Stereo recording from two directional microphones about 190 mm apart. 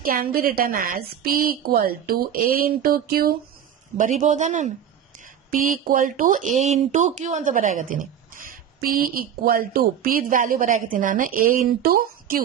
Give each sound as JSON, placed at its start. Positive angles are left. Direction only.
{"t": 0.0, "sound": "speech", "side_deg": -50}